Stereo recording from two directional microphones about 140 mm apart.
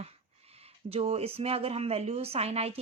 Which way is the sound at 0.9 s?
45° right (ahead or behind).